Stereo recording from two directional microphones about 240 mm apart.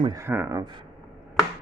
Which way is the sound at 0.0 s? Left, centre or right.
Centre.